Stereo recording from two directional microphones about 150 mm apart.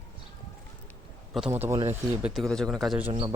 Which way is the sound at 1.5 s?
15° right (ahead or behind).